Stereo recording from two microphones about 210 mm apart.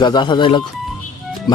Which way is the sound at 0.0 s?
20° left (ahead or behind).